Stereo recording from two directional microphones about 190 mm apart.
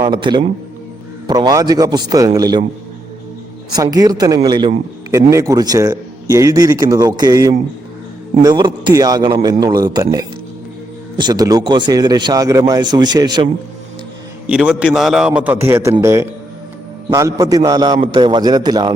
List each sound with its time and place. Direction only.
0.1 s speech: 25° right (ahead or behind)
3.8 s speech: 20° right (ahead or behind)
14.4 s a man's voice: 5° right (ahead or behind); by 18.9 s 20° right (ahead or behind)